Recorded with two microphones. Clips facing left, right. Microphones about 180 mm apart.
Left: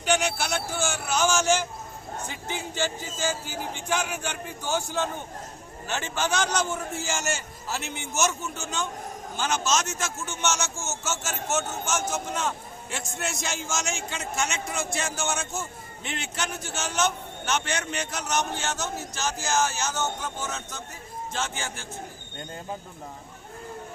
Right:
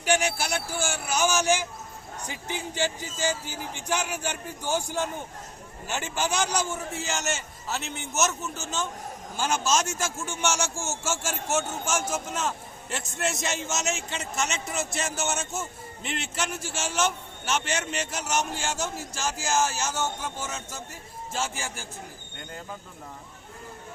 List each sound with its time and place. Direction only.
0.0 s a man's voice: 10° right (ahead or behind)
3.2 s speech: 50° left (ahead or behind)
4.6 s a man's voice: 10° right (ahead or behind)